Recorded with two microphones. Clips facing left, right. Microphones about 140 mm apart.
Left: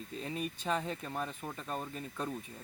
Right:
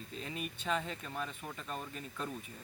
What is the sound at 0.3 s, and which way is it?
Speech, 35° left (ahead or behind).